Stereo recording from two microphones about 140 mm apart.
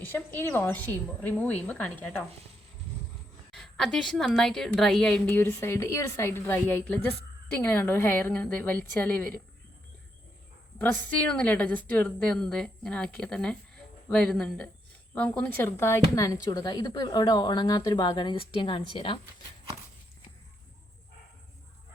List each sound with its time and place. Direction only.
0.3 s a woman's voice: 15° left (ahead or behind)
3.5 s a woman's voice: centre (ahead or behind)
10.8 s a woman's voice: 10° left (ahead or behind); by 19.2 s 35° left (ahead or behind)